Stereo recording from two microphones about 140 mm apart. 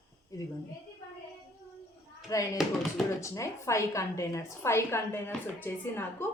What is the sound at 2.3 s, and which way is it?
A woman's voice, 25° left (ahead or behind).